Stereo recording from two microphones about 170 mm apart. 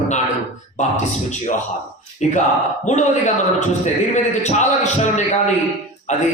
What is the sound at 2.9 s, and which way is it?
Speech, 45° left (ahead or behind).